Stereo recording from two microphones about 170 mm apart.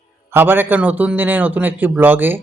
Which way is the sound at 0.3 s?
15° right (ahead or behind).